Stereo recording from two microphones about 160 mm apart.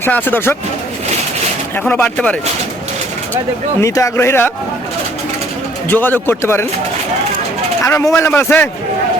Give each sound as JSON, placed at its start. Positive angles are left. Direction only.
{"t": 0.0, "sound": "a man's voice", "side_deg": 10}
{"t": 1.7, "sound": "a man's voice", "side_deg": 10}
{"t": 3.8, "sound": "a man's voice", "side_deg": 20}
{"t": 5.9, "sound": "a man's voice", "side_deg": 10}
{"t": 7.9, "sound": "a man's voice", "side_deg": 15}